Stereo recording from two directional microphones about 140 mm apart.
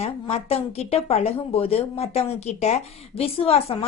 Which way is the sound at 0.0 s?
45° left (ahead or behind).